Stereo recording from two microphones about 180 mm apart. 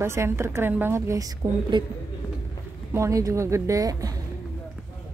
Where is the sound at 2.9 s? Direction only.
15° right (ahead or behind).